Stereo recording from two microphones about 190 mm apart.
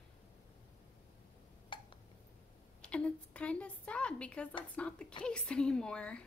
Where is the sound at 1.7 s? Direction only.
25° left (ahead or behind).